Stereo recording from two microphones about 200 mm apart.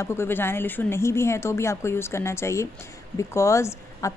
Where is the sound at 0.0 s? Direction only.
10° left (ahead or behind).